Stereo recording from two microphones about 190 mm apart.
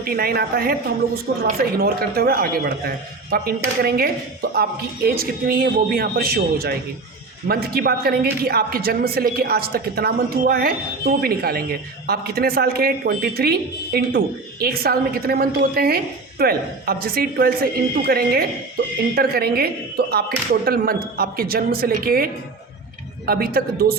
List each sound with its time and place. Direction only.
0.0 s speech: 50° right (ahead or behind)